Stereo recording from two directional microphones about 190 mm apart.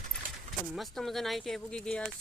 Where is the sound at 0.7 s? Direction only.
Centre (ahead or behind).